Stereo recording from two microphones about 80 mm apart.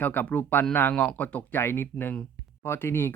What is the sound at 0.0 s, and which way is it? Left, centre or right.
Speech, left.